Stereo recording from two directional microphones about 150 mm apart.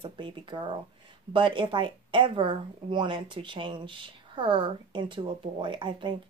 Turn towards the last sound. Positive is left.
turn(degrees=-35)  # may be behind; listen again after turning